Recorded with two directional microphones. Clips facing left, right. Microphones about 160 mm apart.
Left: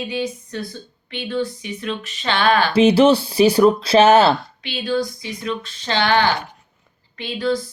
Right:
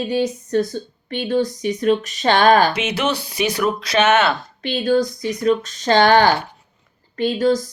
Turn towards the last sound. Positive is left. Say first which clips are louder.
# right 5 dB
turn(degrees=-40)  # may be behind; listen again after turning